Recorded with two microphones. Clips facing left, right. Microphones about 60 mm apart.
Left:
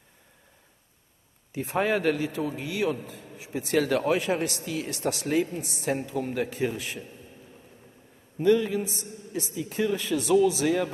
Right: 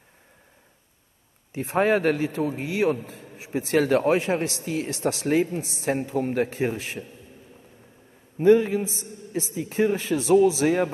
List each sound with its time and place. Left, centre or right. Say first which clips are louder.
1.5 s a man's voice: right 4 dB; right
8.4 s a man's voice: right 5 dB; right
8.8 s a woman's voice: right 3 dB; left
9.5 s a man's voice: right 4 dB; right